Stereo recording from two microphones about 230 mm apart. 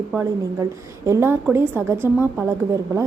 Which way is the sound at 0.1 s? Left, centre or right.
Centre.